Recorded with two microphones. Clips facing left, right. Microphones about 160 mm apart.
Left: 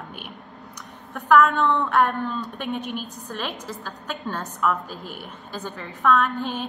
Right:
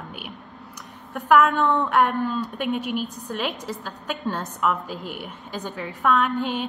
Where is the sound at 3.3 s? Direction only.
10° right (ahead or behind).